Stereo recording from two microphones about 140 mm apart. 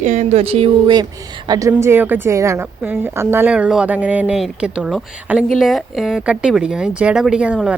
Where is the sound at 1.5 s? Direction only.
25° right (ahead or behind).